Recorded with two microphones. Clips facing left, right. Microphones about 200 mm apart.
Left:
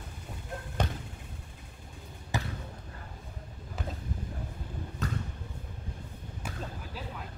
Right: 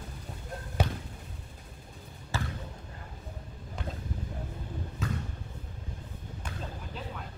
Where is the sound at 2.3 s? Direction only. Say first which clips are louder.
Left 1 dB; 15° left (ahead or behind).